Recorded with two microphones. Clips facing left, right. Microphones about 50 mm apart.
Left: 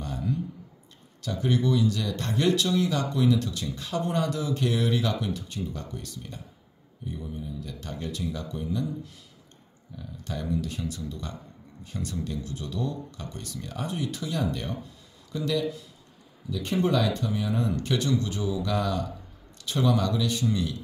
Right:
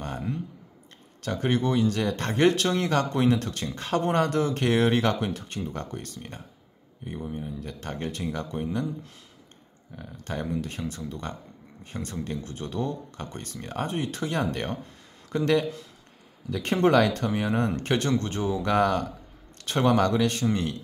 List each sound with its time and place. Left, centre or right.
0.0 s a sound: right
1.2 s speech: right
9.9 s speech: right